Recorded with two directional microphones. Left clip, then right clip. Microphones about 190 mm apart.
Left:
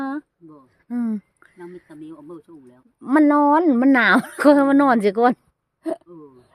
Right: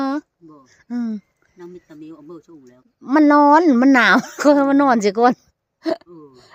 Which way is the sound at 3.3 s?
15° right (ahead or behind).